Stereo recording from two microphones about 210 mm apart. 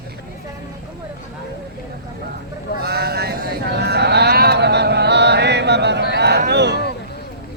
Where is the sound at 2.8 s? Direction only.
50° right (ahead or behind).